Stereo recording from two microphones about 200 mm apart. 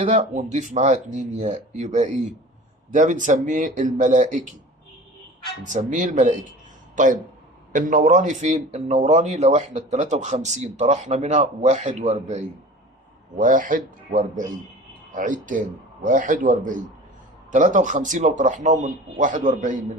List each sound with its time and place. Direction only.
0.0 s speech: 35° right (ahead or behind)
5.6 s speech: 40° right (ahead or behind)